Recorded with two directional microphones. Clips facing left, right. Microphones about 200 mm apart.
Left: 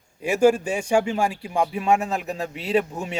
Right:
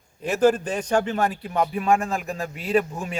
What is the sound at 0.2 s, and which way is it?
A man's voice, 10° left (ahead or behind).